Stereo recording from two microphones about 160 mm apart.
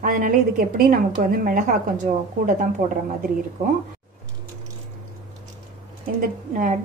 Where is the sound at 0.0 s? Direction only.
60° right (ahead or behind).